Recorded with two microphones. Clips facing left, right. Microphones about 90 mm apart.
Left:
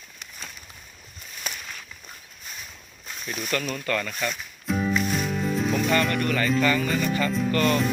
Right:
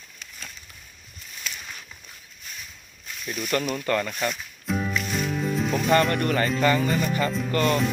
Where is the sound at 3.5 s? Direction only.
25° right (ahead or behind).